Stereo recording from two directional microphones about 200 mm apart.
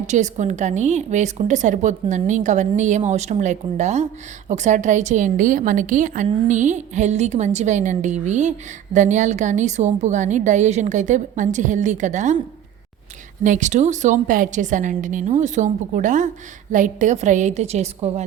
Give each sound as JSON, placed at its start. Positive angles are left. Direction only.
{"t": 0.1, "sound": "a woman's voice", "side_deg": -35}
{"t": 13.4, "sound": "a woman's voice", "side_deg": -40}